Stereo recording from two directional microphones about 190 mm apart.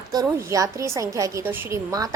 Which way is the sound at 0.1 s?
20° right (ahead or behind).